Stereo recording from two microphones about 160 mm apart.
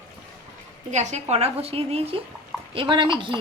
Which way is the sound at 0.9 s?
45° right (ahead or behind).